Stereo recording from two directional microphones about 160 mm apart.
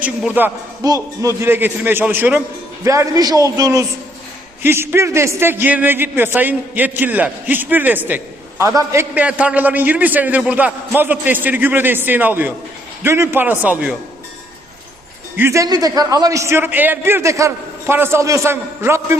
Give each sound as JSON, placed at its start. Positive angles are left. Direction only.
{"t": 0.0, "sound": "a man's voice", "side_deg": -10}
{"t": 15.4, "sound": "a man's voice", "side_deg": -15}